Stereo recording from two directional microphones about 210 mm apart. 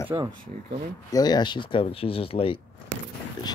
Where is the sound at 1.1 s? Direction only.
20° left (ahead or behind).